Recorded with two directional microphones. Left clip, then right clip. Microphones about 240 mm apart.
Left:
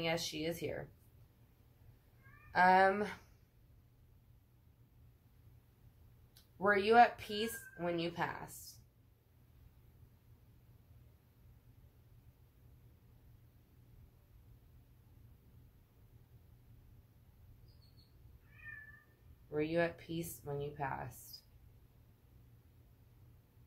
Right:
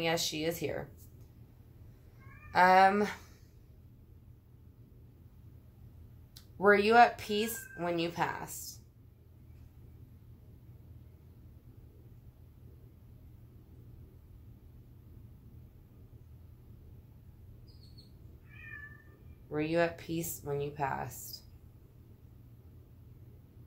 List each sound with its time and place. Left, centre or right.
0.0 s speech: right
2.5 s speech: right
6.6 s speech: right
19.5 s speech: right